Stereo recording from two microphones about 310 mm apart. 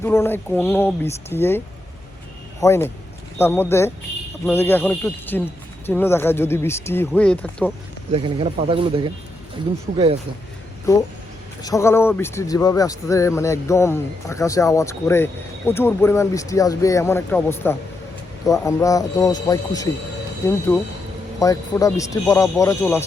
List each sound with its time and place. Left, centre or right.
0.0 s speech: centre
8.1 s speech: centre
10.9 s speech: centre
21.3 s speech: centre